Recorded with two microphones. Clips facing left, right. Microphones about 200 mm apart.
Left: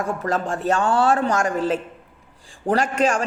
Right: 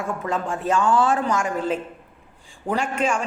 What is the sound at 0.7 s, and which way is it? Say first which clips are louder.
Speech: even; 65° left (ahead or behind).